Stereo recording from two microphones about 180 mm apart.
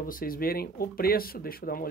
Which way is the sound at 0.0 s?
50° left (ahead or behind).